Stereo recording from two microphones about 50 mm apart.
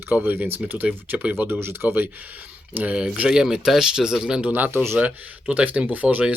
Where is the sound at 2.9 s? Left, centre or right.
Right.